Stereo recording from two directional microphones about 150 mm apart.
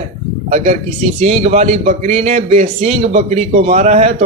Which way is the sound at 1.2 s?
45° right (ahead or behind).